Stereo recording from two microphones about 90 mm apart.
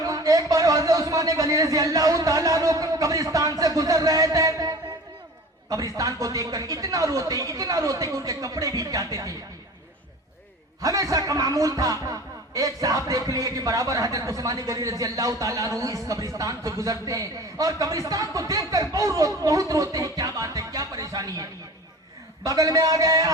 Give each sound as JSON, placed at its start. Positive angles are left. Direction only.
{"t": 0.0, "sound": "a sound", "side_deg": -45}
{"t": 5.6, "sound": "speech", "side_deg": -40}
{"t": 10.8, "sound": "speech", "side_deg": -40}
{"t": 22.4, "sound": "speech", "side_deg": -40}